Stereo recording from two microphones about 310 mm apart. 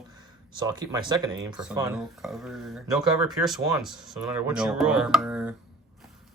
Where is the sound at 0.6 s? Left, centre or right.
Centre.